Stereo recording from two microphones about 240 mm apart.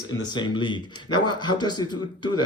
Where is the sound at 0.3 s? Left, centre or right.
Centre.